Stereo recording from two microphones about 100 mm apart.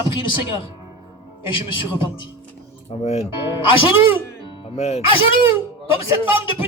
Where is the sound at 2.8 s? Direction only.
90° left.